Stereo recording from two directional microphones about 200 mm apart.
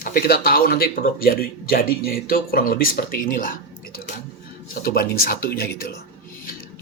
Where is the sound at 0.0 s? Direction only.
45° left (ahead or behind).